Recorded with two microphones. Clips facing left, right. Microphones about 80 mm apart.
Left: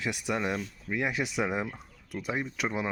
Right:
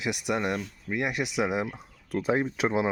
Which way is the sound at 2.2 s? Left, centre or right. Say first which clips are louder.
Right 6 dB; right.